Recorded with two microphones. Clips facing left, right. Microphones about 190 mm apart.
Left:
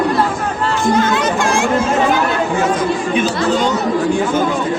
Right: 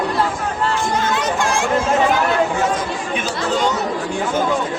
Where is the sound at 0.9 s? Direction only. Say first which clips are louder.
Left 5 dB; 70° left (ahead or behind); by 1.7 s 90° left.